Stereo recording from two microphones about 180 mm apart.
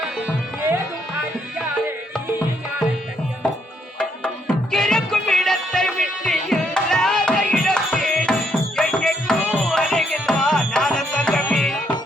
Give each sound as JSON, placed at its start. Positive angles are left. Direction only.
{"t": 3.9, "sound": "music", "side_deg": 5}